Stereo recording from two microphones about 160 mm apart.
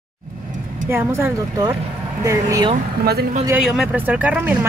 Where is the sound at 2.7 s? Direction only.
75° right (ahead or behind).